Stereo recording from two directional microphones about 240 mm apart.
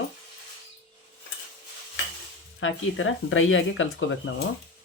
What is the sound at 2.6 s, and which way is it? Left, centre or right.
Speech, left.